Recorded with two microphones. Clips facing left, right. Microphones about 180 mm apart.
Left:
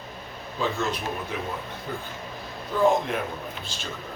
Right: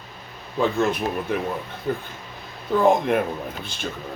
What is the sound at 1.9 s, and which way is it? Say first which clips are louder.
Speech: right 9 dB; 55° right (ahead or behind).